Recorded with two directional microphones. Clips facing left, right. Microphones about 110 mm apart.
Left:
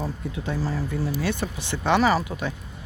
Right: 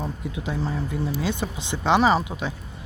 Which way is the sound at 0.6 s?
20° right (ahead or behind).